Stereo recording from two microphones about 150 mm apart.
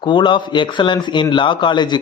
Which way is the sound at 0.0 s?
35° left (ahead or behind).